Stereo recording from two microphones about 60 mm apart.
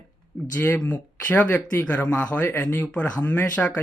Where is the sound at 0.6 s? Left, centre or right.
Left.